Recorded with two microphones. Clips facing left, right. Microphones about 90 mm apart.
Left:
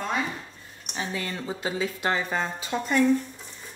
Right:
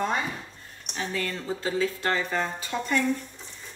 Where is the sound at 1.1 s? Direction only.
15° left (ahead or behind).